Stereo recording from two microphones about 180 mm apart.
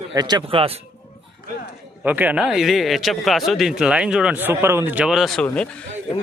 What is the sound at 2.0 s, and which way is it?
Speech, 10° right (ahead or behind).